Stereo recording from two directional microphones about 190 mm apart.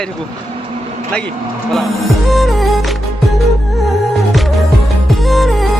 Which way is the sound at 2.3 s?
Centre (ahead or behind).